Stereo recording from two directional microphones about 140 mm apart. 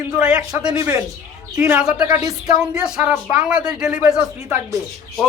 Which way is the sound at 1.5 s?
10° right (ahead or behind).